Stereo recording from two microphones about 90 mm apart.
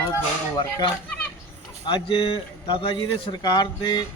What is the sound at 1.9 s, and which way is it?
Speech, 65° left (ahead or behind).